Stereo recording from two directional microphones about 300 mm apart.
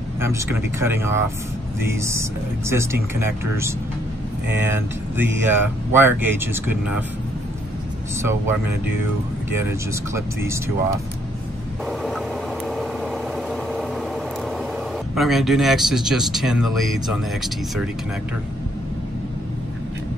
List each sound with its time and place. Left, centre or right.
0.2 s speech: centre
8.2 s speech: centre
11.8 s a sound: centre
12.6 s vehicle: centre
15.1 s speech: centre